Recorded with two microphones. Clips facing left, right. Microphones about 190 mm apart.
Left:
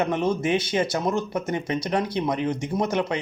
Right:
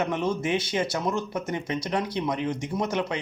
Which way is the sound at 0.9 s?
40° left (ahead or behind).